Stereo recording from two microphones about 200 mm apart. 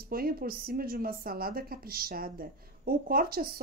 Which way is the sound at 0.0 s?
50° right (ahead or behind).